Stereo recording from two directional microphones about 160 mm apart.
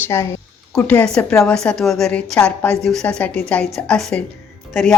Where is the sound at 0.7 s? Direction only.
5° left (ahead or behind).